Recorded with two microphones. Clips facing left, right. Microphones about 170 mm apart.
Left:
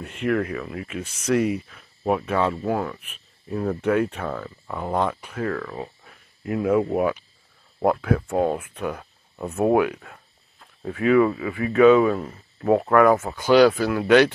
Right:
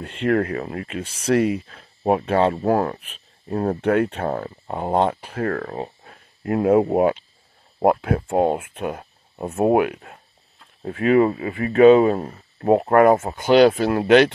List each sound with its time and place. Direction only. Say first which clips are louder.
0.0 s speech: right 3 dB; 30° right (ahead or behind)
2.5 s speech: right 5 dB; 40° right (ahead or behind)
3.4 s speech: right 3 dB; 60° right (ahead or behind)
4.6 s speech: right 4 dB; 30° right (ahead or behind)
5.4 s speech: right 3 dB; 45° right (ahead or behind); by 14.3 s 25° right (ahead or behind)